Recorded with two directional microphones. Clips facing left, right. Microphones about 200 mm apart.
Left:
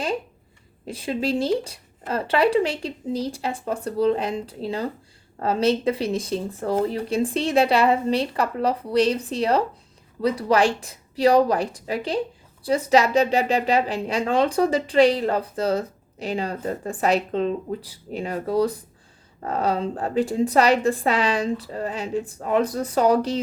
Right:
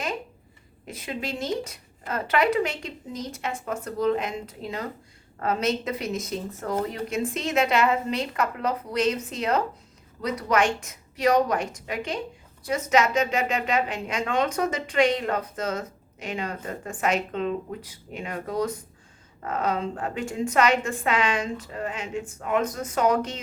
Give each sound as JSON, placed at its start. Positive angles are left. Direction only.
{"t": 0.9, "sound": "a woman's voice", "side_deg": 30}